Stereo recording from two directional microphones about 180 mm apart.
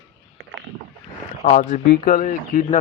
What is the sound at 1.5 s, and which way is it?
Speech, 45° left (ahead or behind).